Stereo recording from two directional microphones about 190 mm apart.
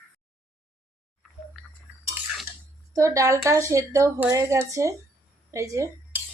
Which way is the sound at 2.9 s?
15° right (ahead or behind).